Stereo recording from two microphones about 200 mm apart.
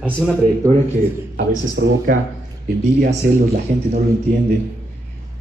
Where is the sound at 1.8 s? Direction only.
65° right (ahead or behind).